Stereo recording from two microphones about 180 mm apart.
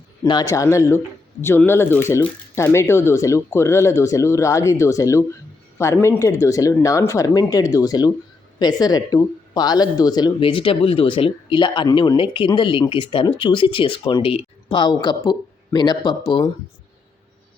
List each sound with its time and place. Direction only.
0.2 s speech: 20° left (ahead or behind)